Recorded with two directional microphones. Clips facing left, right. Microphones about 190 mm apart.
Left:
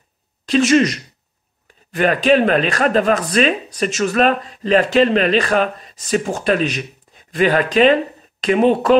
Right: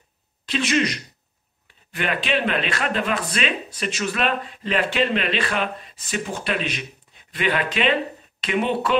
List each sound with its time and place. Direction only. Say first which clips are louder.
0.5 s speech: left 9 dB; 45° left (ahead or behind)